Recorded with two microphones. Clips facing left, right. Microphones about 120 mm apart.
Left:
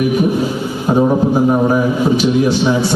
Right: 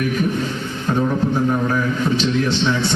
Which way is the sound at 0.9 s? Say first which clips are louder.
Left 6 dB; 35° left (ahead or behind).